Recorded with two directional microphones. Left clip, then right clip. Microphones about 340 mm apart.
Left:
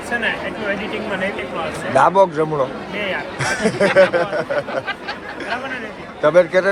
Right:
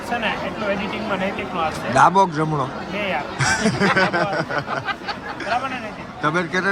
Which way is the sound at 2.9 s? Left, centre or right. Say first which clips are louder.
Right 1 dB; right.